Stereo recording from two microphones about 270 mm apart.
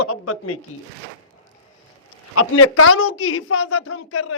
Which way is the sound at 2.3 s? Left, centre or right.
Left.